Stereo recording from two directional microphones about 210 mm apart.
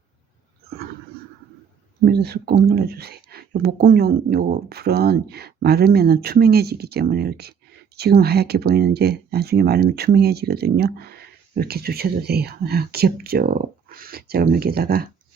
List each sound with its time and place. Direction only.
2.0 s speech: 50° right (ahead or behind)